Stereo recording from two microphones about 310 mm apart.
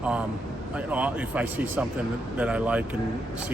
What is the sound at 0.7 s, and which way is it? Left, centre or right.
A man's voice, centre.